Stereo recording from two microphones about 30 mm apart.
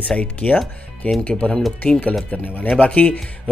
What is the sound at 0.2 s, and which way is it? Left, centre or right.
Speech, left.